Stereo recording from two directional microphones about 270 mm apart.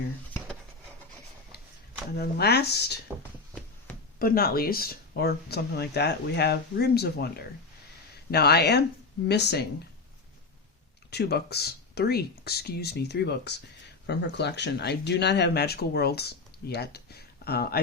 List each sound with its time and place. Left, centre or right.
1.5 s a sound: left
2.1 s speech: left
4.2 s speech: left
11.1 s speech: left